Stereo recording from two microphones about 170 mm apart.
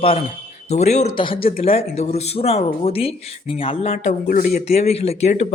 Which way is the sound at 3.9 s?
55° left (ahead or behind).